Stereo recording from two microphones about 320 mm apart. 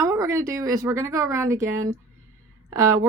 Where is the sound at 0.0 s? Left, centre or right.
Centre.